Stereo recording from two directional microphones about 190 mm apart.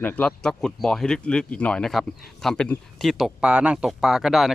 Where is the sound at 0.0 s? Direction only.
5° left (ahead or behind).